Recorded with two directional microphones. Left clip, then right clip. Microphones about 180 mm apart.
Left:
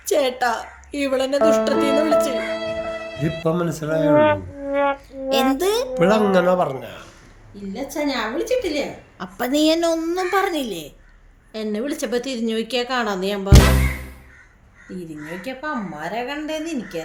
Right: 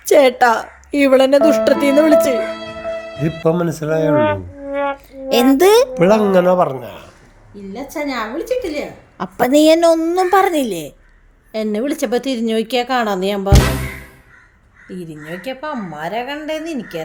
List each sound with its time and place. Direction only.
0.0 s a woman's voice: 55° right (ahead or behind)
2.4 s music: centre (ahead or behind)
3.4 s a woman's voice: 40° right (ahead or behind)
4.1 s music: centre (ahead or behind)
5.5 s a woman's voice: 50° right (ahead or behind)
5.9 s a woman's voice: 35° right (ahead or behind)
7.5 s a woman's voice: 55° right (ahead or behind)
13.5 s speech: centre (ahead or behind)
14.8 s a woman's voice: 55° right (ahead or behind)